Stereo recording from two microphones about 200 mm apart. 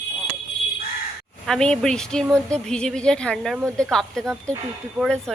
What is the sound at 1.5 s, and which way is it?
Speech, 5° left (ahead or behind).